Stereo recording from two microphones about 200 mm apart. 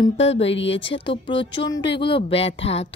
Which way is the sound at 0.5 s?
65° left (ahead or behind).